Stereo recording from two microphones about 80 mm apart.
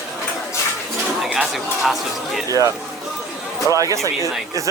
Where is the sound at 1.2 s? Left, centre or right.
Centre.